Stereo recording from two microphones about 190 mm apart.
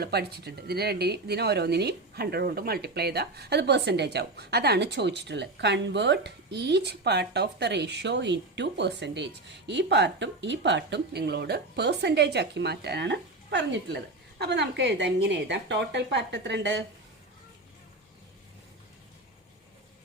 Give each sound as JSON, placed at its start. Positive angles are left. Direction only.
{"t": 0.0, "sound": "speech", "side_deg": -55}